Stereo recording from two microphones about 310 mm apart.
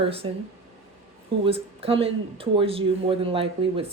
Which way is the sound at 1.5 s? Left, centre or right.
Centre.